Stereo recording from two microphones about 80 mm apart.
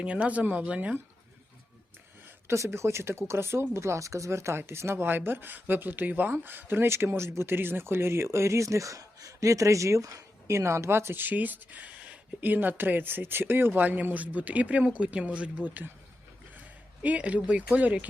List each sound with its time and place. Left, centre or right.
0.0 s speech: centre
2.5 s speech: right; by 17.9 s centre